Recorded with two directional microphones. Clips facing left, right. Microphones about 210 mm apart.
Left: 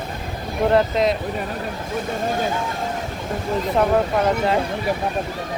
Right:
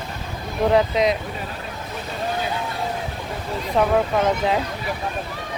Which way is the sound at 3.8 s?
Centre (ahead or behind).